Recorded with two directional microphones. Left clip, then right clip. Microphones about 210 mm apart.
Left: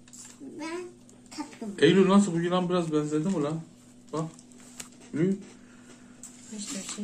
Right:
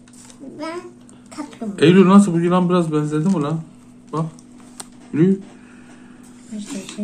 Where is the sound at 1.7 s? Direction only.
40° right (ahead or behind).